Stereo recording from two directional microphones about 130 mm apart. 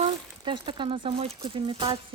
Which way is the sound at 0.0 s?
40° right (ahead or behind).